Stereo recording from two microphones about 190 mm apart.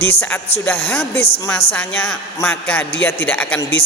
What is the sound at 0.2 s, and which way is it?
A man's voice, 10° left (ahead or behind).